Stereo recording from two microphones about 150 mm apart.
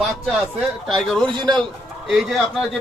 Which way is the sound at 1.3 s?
30° right (ahead or behind).